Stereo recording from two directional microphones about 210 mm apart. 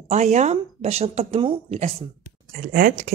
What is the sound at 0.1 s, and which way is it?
Speech, 35° right (ahead or behind).